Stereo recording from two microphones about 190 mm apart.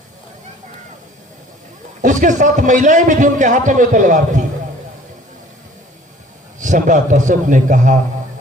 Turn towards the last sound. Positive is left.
turn(degrees=-40)  # may be behind; listen again after turning